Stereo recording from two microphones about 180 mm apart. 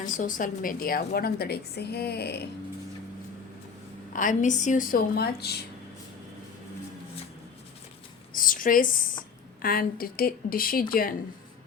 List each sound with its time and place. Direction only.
0.0 s a woman's voice: 45° left (ahead or behind); by 2.5 s 65° left (ahead or behind)
4.1 s speech: 45° left (ahead or behind); by 5.5 s 60° left (ahead or behind)
8.3 s a woman's voice: 50° left (ahead or behind)